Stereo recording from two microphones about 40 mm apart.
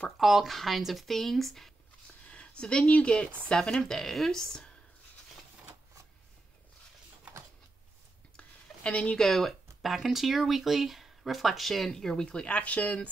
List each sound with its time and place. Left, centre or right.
0.2 s speech: centre
2.2 s a sound: left
2.9 s speech: left
3.7 s speech: centre
8.4 s a sound: left
9.2 s speech: centre
9.8 s speech: centre
12.3 s speech: left